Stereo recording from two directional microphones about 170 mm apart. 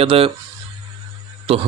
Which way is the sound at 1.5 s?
35° right (ahead or behind).